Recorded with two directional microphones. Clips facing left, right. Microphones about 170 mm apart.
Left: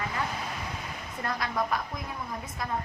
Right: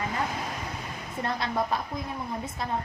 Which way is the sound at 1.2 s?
25° right (ahead or behind).